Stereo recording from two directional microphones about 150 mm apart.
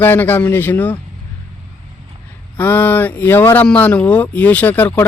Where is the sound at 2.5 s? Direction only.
15° left (ahead or behind).